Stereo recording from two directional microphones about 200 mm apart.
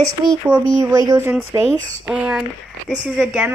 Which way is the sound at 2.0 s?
5° right (ahead or behind).